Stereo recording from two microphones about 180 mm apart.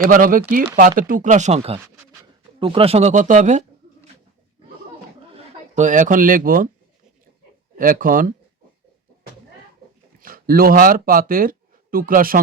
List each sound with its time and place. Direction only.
0.0 s speech: 50° right (ahead or behind)
5.3 s speech: 35° right (ahead or behind)
7.8 s speech: 50° right (ahead or behind)
10.2 s speech: 55° right (ahead or behind)